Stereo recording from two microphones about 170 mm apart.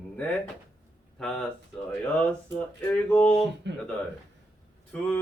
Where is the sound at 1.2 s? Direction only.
5° left (ahead or behind).